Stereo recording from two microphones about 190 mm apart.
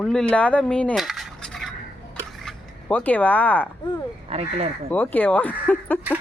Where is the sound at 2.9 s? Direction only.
10° left (ahead or behind).